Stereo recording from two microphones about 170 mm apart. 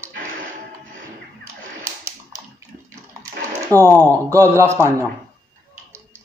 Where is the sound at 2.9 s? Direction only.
20° right (ahead or behind).